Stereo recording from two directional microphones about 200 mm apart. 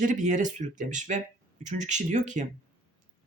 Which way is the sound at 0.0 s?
40° right (ahead or behind).